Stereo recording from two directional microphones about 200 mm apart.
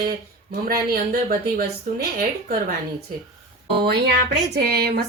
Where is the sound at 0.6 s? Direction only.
45° right (ahead or behind).